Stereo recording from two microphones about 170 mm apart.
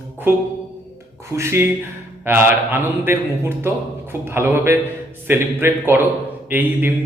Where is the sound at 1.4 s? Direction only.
15° right (ahead or behind).